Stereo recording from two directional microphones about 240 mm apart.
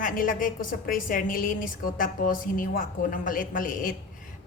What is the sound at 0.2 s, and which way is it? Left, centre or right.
A woman's voice, left.